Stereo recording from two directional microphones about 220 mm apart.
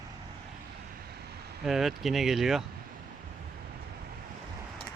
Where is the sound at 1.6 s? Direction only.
Centre (ahead or behind).